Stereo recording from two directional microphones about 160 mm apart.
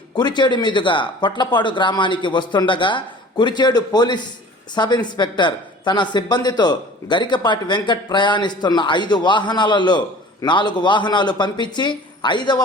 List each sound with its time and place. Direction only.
0.2 s speech: 30° left (ahead or behind)